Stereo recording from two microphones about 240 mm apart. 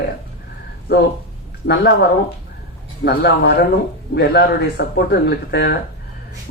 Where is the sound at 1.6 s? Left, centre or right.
Left.